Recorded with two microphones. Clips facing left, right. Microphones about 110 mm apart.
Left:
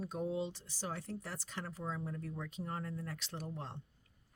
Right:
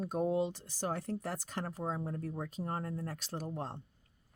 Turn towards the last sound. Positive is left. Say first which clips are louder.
# right 5 dB
turn(degrees=-40)  # may be behind; listen again after turning